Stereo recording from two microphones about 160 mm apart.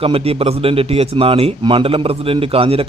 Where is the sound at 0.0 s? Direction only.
35° right (ahead or behind).